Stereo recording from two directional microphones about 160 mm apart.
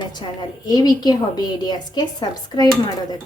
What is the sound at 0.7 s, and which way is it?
Speech, 25° left (ahead or behind).